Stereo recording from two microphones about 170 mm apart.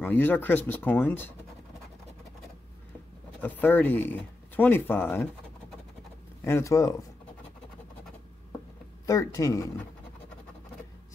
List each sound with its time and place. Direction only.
0.0 s speech: 10° left (ahead or behind)
3.3 s speech: 10° left (ahead or behind)
6.4 s speech: 15° left (ahead or behind)
9.0 s speech: 20° left (ahead or behind)